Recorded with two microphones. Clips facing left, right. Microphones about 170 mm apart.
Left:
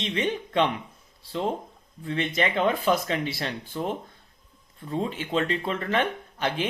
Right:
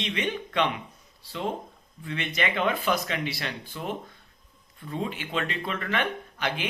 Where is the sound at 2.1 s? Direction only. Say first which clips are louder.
Left 4 dB; 30° left (ahead or behind).